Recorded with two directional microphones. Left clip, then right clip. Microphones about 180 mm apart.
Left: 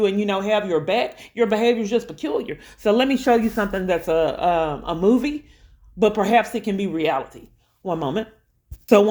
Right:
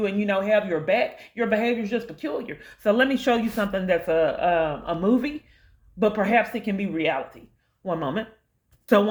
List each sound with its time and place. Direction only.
0.0 s speech: 35° left (ahead or behind)
3.2 s speech: 20° left (ahead or behind); by 8.3 s 35° left (ahead or behind)